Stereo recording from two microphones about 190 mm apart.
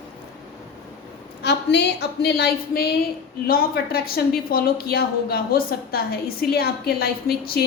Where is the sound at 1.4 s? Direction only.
65° left (ahead or behind).